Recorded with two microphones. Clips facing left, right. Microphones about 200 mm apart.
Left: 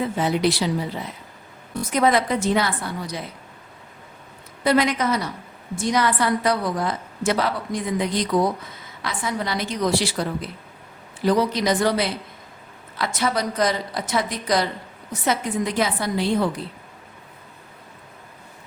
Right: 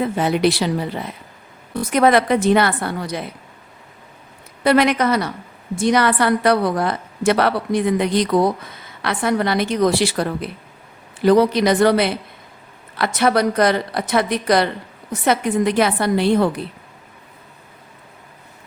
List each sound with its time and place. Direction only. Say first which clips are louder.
0.0 s a woman's voice: right 4 dB; 65° right (ahead or behind)
4.6 s a woman's voice: right 4 dB; 65° right (ahead or behind)